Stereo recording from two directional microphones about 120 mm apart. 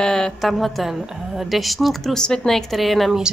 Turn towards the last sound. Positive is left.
turn(degrees=0)  # may be behind; listen again after turning